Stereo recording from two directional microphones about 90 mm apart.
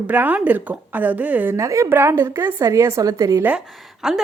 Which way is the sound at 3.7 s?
Centre (ahead or behind).